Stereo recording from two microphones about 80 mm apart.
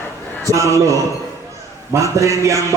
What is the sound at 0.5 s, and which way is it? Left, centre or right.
A man's voice, right.